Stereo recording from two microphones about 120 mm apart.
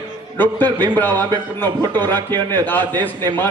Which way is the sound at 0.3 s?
15° left (ahead or behind).